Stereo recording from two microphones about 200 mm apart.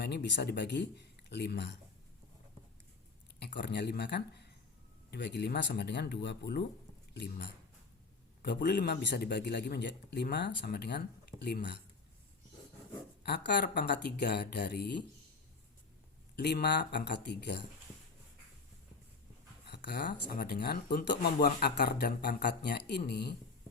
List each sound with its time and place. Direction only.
0.0 s a man's voice: 60° left (ahead or behind)
3.4 s a man's voice: 60° left (ahead or behind)
13.2 s a man's voice: 55° left (ahead or behind)
16.3 s a man's voice: 55° left (ahead or behind)
19.6 s speech: 55° left (ahead or behind)